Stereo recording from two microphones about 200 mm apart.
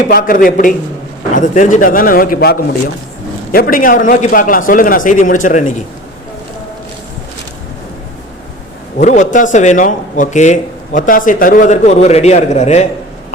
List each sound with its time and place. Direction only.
0.1 s a man's voice: 45° left (ahead or behind)
9.0 s speech: 35° left (ahead or behind)